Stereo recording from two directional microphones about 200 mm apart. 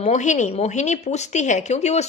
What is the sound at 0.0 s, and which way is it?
Speech, 35° left (ahead or behind).